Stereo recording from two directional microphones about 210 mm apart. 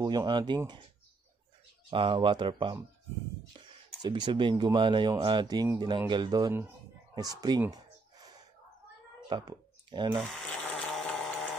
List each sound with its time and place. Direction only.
0.0 s speech: 20° right (ahead or behind)
1.9 s speech: 25° right (ahead or behind)
4.0 s speech: 20° right (ahead or behind)
7.2 s a sound: 15° right (ahead or behind)
9.3 s speech: 20° right (ahead or behind)
10.2 s sewing machine: 5° left (ahead or behind)